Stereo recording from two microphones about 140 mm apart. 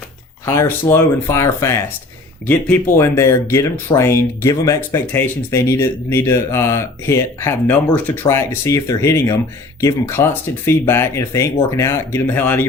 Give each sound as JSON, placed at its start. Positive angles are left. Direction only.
{"t": 0.4, "sound": "speech", "side_deg": 20}